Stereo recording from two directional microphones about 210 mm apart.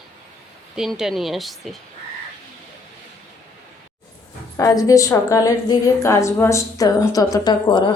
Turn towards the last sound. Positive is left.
turn(degrees=20)  # may be behind; listen again after turning